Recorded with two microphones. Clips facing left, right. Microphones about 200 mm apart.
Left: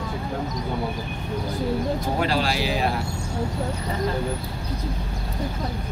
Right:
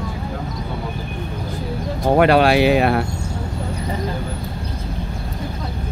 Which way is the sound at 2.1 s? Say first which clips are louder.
Right 14 dB; 65° right (ahead or behind).